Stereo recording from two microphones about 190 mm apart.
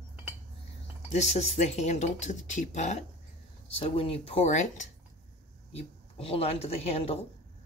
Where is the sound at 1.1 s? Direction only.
35° left (ahead or behind).